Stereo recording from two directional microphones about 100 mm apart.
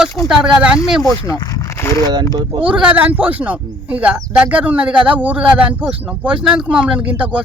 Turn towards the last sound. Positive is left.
turn(degrees=-15)  # may be behind; listen again after turning